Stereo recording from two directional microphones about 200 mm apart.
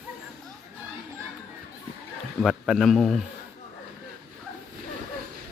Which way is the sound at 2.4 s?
Centre (ahead or behind).